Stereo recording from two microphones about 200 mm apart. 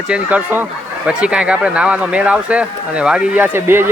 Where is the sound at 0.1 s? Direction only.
5° right (ahead or behind).